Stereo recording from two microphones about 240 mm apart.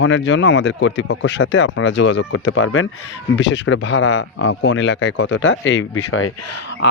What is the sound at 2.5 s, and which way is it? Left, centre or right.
Speech, left.